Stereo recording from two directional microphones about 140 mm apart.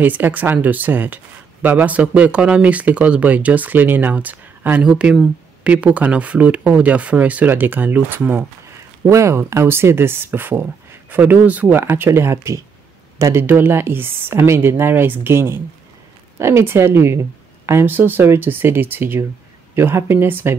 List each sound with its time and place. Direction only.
0.0 s speech: 10° right (ahead or behind)